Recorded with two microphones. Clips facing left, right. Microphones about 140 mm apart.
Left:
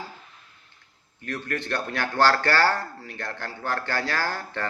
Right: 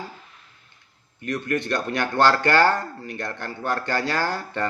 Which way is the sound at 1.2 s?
15° right (ahead or behind).